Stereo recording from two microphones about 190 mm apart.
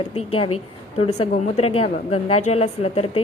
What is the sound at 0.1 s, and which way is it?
A woman's voice, 30° left (ahead or behind).